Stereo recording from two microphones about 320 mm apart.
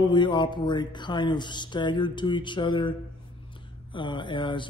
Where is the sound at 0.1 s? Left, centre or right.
Centre.